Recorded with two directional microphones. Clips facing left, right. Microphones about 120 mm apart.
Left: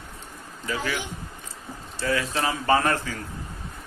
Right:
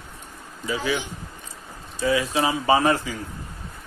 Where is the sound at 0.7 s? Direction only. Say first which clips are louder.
Right 3 dB; 10° right (ahead or behind).